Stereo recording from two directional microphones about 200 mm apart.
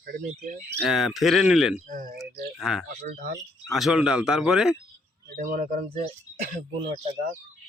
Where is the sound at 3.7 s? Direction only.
Centre (ahead or behind).